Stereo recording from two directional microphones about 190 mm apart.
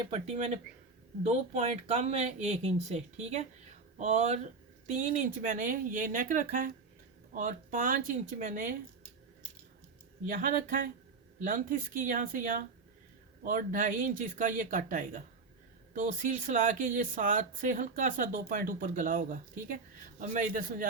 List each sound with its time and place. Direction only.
0.1 s speech: 35° right (ahead or behind)
10.2 s speech: 45° right (ahead or behind)